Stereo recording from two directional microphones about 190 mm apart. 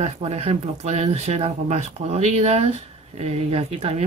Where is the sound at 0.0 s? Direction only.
35° right (ahead or behind).